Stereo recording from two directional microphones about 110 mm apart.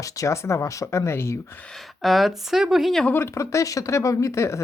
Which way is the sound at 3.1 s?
25° left (ahead or behind).